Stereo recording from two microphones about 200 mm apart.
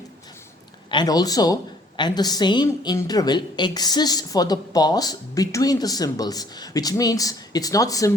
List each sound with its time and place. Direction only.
0.9 s a woman's voice: 20° left (ahead or behind)